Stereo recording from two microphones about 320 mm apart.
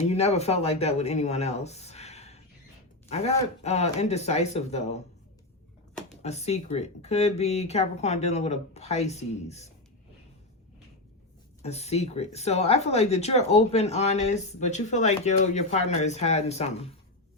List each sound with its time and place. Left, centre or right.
0.1 s speech: centre
6.2 s speech: centre
11.6 s speech: centre